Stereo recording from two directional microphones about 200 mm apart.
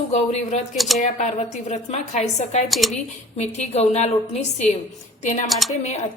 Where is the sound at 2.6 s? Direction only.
Centre (ahead or behind).